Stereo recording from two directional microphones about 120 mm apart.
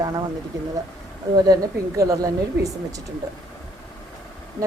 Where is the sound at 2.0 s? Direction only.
30° right (ahead or behind).